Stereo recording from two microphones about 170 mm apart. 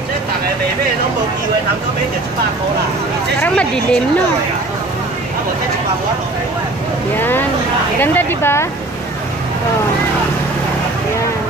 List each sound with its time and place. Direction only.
3.3 s speech: 5° left (ahead or behind)
7.2 s speech: 10° left (ahead or behind)